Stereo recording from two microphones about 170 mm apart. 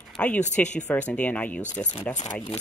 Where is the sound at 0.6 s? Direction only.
45° left (ahead or behind).